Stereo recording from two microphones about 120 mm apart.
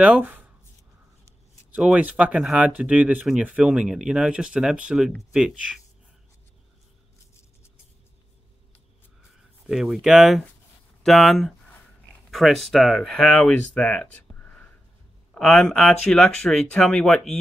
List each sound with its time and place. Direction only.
0.0 s speech: 15° right (ahead or behind)
1.7 s speech: 5° right (ahead or behind)
9.7 s speech: 5° right (ahead or behind)
15.3 s speech: 10° left (ahead or behind)